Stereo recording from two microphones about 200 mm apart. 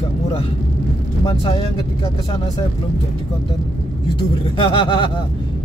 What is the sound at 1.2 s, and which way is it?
Speech, 30° left (ahead or behind).